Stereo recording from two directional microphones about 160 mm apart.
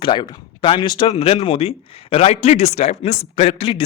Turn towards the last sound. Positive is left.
turn(degrees=35)  # may be behind; listen again after turning